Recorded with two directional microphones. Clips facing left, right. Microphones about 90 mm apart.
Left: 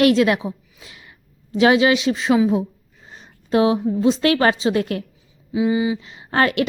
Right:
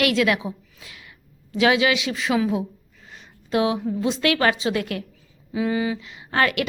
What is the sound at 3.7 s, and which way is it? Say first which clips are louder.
A woman's voice: left 6 dB; 30° left (ahead or behind).